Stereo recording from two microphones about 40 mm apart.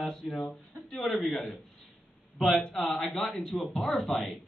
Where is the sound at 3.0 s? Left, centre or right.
Centre.